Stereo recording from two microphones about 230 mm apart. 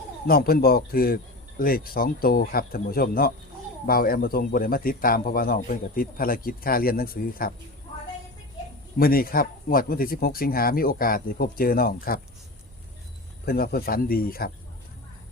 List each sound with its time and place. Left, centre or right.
0.3 s a man's voice: left
9.0 s a man's voice: left
13.4 s a man's voice: left